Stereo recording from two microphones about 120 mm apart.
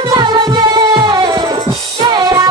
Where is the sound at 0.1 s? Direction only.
35° right (ahead or behind).